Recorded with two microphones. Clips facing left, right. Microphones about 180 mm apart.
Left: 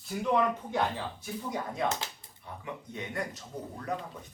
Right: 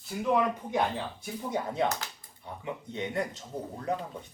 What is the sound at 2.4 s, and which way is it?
Speech, 25° right (ahead or behind).